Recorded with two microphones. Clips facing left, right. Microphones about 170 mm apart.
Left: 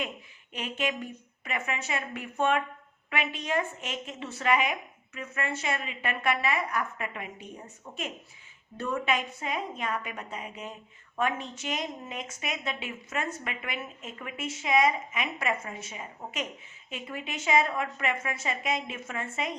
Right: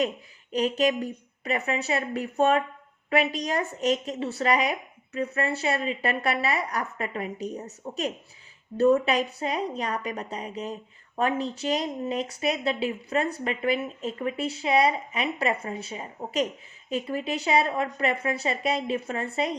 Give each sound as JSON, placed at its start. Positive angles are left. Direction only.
{"t": 0.5, "sound": "speech", "side_deg": -40}